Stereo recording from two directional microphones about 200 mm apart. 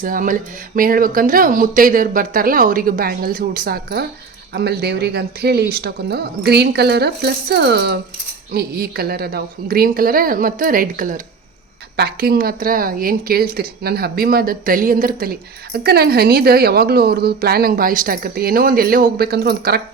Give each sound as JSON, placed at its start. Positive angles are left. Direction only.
{"t": 0.0, "sound": "a woman's voice", "side_deg": -45}